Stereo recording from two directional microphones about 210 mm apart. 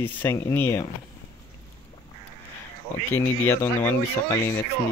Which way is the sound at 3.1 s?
10° left (ahead or behind).